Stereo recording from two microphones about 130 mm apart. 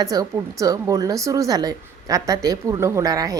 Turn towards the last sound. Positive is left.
turn(degrees=-30)  # may be behind; listen again after turning